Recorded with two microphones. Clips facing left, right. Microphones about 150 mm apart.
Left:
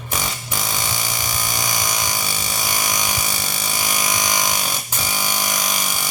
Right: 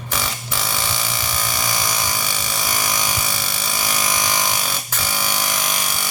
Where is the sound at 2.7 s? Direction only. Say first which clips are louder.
Right 1 dB; 15° left (ahead or behind).